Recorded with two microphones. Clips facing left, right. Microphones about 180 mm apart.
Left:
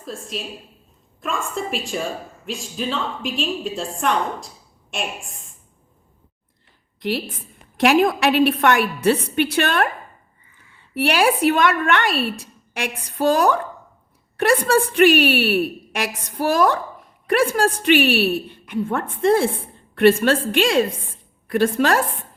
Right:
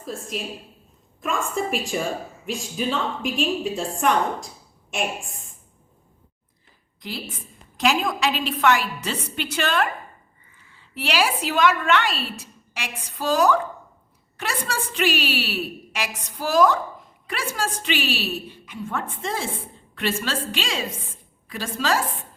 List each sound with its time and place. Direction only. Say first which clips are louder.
0.0 s a woman's voice: even; 10° right (ahead or behind)
7.0 s a woman's voice: left 9 dB; 60° left (ahead or behind)
10.9 s a woman's voice: left 6 dB; 55° left (ahead or behind)